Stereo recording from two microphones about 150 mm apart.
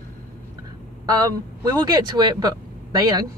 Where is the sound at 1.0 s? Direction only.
25° right (ahead or behind).